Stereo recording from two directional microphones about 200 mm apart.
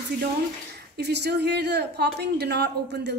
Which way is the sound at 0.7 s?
55° right (ahead or behind).